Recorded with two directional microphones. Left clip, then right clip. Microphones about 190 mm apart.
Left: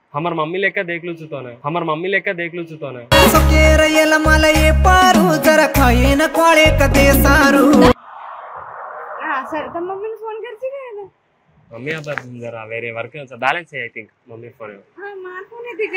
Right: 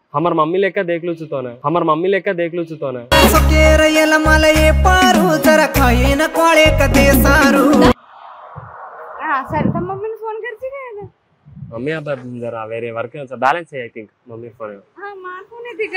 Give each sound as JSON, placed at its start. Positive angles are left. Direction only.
{"t": 0.1, "sound": "a man's voice", "side_deg": -50}
{"t": 3.1, "sound": "music", "side_deg": 0}
{"t": 9.2, "sound": "bow-wow", "side_deg": 0}
{"t": 11.7, "sound": "speech", "side_deg": -50}
{"t": 14.6, "sound": "a sound", "side_deg": -40}